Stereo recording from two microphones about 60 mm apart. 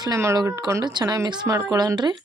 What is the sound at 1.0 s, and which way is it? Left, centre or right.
Speech, right.